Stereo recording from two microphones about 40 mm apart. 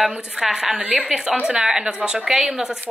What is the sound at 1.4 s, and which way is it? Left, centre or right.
A woman's voice, right.